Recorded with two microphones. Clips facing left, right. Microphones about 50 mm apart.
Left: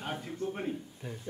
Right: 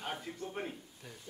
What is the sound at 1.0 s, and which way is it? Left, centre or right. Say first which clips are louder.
Speech: left 8 dB; centre.